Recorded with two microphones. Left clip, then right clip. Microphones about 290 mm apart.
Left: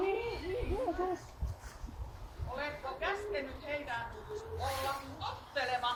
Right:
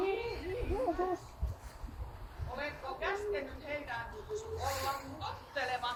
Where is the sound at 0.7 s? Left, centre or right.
Centre.